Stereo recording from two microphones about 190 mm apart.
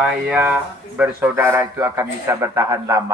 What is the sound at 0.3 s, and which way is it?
Speech, 10° right (ahead or behind).